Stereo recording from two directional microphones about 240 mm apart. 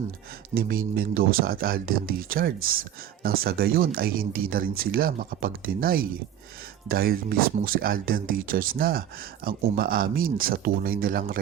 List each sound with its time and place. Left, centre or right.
0.5 s speech: right